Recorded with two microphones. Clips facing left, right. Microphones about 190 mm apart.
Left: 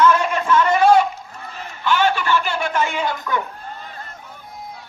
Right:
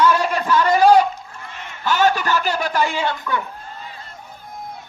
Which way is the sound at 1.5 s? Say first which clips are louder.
Left 3 dB; 35° left (ahead or behind).